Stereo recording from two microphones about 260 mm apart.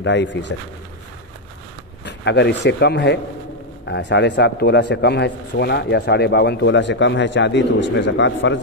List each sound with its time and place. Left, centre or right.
0.0 s speech: left
2.0 s speech: left